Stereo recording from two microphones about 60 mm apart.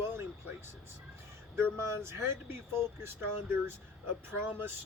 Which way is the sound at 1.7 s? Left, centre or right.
Right.